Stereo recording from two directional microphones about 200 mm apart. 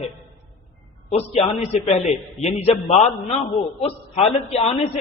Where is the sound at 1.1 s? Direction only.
30° left (ahead or behind).